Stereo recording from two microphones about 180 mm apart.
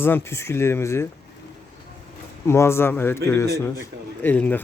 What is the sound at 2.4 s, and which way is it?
Speech, 15° left (ahead or behind).